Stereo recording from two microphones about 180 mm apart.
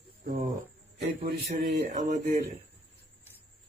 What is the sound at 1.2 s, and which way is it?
Speech, 40° right (ahead or behind).